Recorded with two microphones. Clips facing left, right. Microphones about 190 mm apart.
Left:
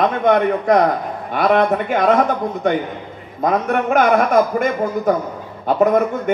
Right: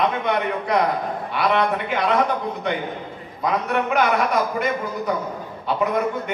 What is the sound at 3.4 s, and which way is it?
A man's voice, 50° left (ahead or behind).